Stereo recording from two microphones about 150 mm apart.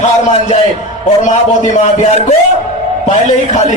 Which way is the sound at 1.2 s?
55° left (ahead or behind).